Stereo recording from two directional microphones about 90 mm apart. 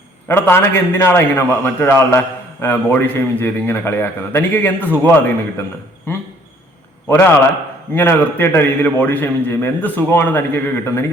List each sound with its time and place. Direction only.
0.3 s a man's voice: 25° left (ahead or behind)
7.1 s a man's voice: 25° left (ahead or behind)